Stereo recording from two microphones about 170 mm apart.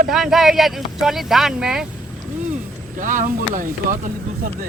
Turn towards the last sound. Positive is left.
turn(degrees=-50)  # may be behind; listen again after turning